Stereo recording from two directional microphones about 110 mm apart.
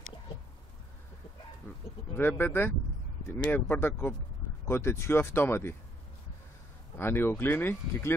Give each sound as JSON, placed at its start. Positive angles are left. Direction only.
{"t": 2.1, "sound": "speech", "side_deg": 20}
{"t": 7.0, "sound": "speech", "side_deg": 20}